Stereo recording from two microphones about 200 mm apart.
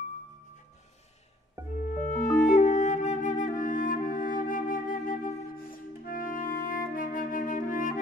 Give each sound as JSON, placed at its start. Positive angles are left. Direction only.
{"t": 1.9, "sound": "music", "side_deg": 35}